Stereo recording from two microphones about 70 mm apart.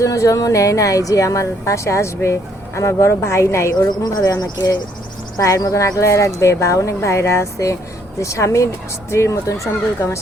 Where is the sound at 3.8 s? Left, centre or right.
Left.